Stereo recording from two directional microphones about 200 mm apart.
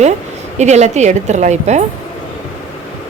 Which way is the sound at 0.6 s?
35° right (ahead or behind).